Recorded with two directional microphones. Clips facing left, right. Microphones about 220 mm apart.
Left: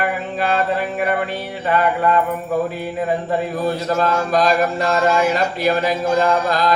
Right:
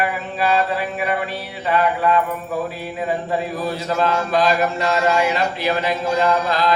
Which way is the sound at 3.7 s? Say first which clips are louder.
Left 2 dB; 50° left (ahead or behind).